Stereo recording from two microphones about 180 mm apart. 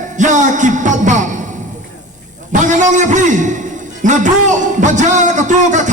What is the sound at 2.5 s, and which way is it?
A man's voice, 45° right (ahead or behind).